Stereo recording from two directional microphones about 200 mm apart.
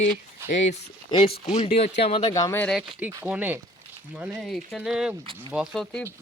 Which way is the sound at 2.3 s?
15° left (ahead or behind).